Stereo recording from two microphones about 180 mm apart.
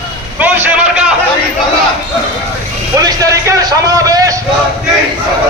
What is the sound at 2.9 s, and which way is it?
Vehicle, 20° right (ahead or behind).